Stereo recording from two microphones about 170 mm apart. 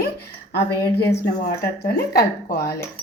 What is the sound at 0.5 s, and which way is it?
Speech, 80° left.